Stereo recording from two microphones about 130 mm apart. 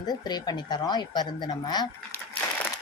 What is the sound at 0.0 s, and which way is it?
A woman's voice, 30° left (ahead or behind).